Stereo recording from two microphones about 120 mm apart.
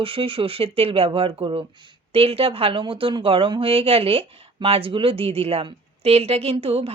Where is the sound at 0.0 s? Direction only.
50° right (ahead or behind).